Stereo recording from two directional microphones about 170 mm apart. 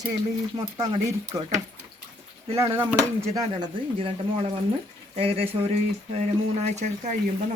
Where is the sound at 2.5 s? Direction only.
15° right (ahead or behind).